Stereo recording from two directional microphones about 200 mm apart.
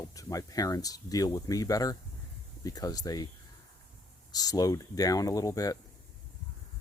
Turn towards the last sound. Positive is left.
turn(degrees=15)  # may be behind; listen again after turning